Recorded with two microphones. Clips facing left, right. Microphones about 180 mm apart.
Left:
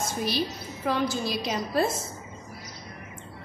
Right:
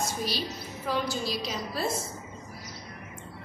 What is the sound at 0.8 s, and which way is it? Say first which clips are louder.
Music: left 3 dB; 55° left (ahead or behind).